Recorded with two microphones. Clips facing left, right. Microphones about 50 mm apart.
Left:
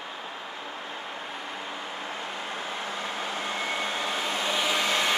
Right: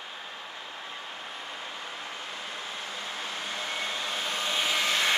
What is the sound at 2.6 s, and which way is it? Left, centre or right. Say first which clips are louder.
Vehicle: left 4 dB; left.